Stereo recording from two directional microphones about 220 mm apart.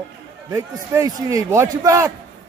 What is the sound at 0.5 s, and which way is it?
A man's voice, 15° right (ahead or behind).